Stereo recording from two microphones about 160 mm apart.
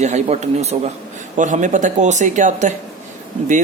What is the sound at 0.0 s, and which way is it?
Speech, 45° right (ahead or behind).